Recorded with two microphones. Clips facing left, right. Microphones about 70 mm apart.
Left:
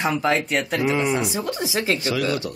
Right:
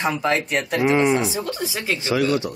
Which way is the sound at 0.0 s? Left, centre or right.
Centre.